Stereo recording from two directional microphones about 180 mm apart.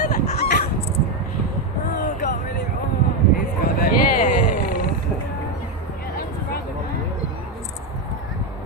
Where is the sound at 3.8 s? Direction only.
55° left (ahead or behind).